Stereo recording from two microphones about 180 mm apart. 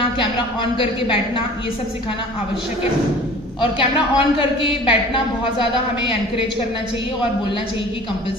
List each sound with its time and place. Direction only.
0.2 s a woman's voice: 30° left (ahead or behind)
3.6 s a woman's voice: 30° left (ahead or behind)